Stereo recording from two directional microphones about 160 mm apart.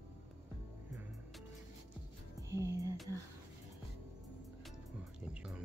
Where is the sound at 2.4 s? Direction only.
20° right (ahead or behind).